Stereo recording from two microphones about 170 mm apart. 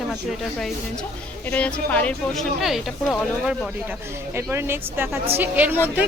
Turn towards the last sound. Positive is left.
turn(degrees=-10)  # may be behind; listen again after turning